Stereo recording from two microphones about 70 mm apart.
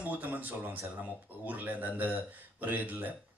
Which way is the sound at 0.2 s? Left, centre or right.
Right.